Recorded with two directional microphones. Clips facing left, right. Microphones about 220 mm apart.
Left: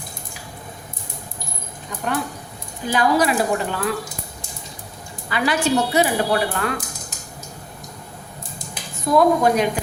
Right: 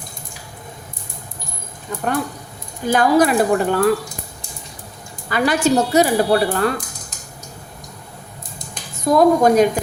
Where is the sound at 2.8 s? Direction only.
50° right (ahead or behind).